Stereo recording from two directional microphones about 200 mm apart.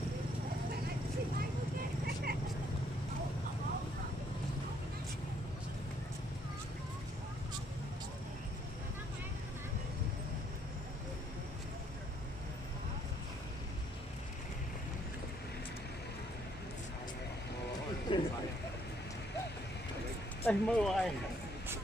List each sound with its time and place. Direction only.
18.1 s speech: 25° left (ahead or behind)
20.4 s speech: 5° left (ahead or behind)